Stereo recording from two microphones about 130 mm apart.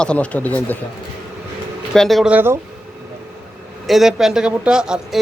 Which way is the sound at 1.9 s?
Centre (ahead or behind).